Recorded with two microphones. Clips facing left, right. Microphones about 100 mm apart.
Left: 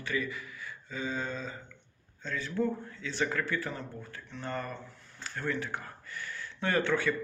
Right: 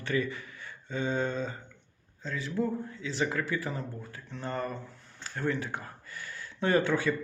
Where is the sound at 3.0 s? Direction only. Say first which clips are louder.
Even; 25° right (ahead or behind).